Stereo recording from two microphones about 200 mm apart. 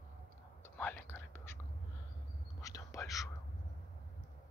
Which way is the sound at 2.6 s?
15° left (ahead or behind).